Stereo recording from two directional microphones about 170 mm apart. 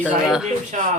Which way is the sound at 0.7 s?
45° right (ahead or behind).